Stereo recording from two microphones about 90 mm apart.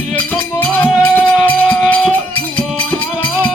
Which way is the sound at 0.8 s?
20° left (ahead or behind).